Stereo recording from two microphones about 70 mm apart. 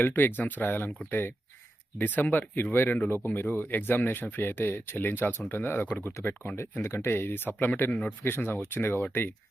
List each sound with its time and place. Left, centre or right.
0.0 s speech: left
2.0 s speech: left
2.7 s speech: left
8.2 s speech: left